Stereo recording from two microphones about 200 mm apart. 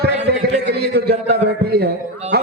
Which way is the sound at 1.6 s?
50° right (ahead or behind).